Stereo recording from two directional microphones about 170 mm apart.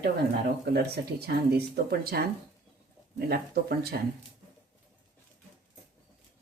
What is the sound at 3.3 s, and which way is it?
Speech, 65° right (ahead or behind).